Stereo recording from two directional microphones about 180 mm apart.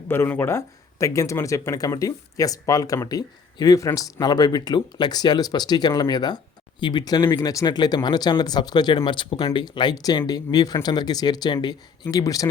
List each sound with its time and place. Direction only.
0.1 s speech: 10° left (ahead or behind)